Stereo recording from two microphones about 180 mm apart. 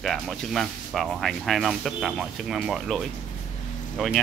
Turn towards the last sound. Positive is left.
turn(degrees=0)  # may be behind; listen again after turning